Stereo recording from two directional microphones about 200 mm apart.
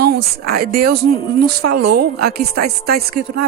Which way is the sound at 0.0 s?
50° right (ahead or behind).